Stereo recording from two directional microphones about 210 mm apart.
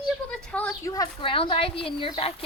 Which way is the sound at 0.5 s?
10° left (ahead or behind).